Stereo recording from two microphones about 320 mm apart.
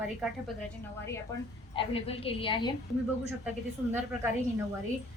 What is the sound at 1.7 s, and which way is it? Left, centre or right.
A woman's voice, centre.